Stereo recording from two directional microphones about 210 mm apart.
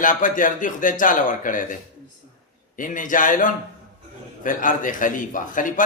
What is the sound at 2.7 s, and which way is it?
A man's voice, 40° left (ahead or behind).